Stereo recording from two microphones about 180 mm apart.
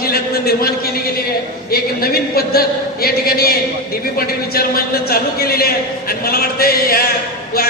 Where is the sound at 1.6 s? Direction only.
55° left (ahead or behind).